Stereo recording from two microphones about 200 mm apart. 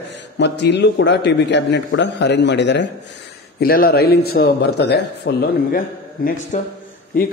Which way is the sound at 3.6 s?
50° left (ahead or behind).